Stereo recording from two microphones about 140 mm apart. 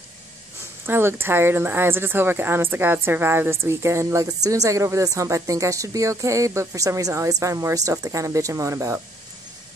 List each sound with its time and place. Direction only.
0.8 s a woman's voice: 15° right (ahead or behind)